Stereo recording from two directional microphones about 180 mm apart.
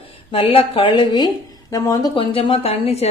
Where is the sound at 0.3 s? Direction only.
30° left (ahead or behind).